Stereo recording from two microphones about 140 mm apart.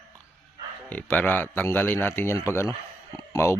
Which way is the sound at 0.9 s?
10° left (ahead or behind).